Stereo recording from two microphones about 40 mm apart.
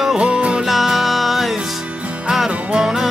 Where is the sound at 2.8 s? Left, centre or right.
Centre.